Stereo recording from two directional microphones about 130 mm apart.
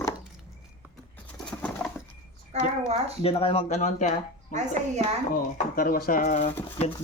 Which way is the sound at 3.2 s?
45° left (ahead or behind).